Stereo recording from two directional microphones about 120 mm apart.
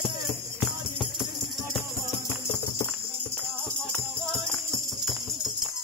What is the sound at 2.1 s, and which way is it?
Music, 35° left (ahead or behind).